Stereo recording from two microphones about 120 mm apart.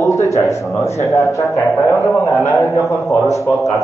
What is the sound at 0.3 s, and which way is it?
A man's voice, 25° left (ahead or behind).